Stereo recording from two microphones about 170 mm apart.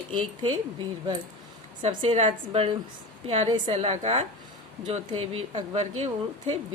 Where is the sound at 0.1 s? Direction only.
30° right (ahead or behind).